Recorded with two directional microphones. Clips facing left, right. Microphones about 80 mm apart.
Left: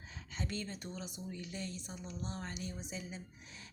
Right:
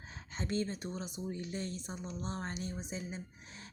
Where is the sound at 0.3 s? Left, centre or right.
Right.